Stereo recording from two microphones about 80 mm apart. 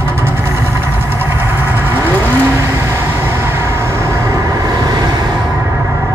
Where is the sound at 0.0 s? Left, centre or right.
Right.